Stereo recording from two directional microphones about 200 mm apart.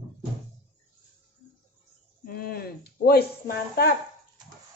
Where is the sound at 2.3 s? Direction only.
50° left (ahead or behind).